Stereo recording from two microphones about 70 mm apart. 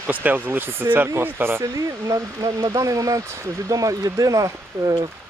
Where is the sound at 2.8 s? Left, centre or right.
Right.